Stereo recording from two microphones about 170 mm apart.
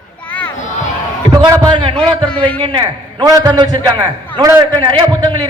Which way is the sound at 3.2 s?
25° right (ahead or behind).